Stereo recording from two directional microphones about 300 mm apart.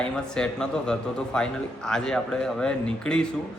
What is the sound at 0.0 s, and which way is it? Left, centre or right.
A man's voice, centre.